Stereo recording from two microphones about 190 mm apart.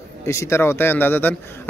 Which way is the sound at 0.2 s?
15° left (ahead or behind).